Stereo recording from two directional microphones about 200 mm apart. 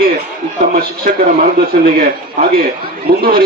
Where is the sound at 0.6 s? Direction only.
45° right (ahead or behind).